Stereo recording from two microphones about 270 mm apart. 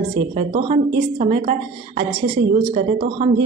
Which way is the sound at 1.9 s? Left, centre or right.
Centre.